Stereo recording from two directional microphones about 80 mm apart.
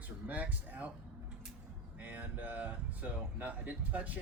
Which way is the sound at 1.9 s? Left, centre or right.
Centre.